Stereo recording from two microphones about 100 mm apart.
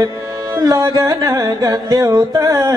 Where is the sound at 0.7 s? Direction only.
35° right (ahead or behind).